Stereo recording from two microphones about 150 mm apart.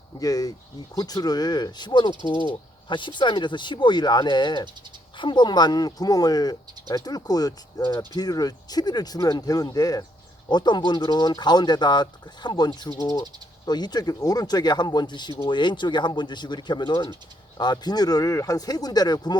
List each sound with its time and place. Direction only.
0.2 s speech: 25° left (ahead or behind)